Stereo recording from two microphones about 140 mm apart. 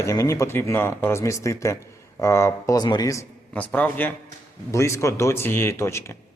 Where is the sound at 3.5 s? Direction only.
10° left (ahead or behind).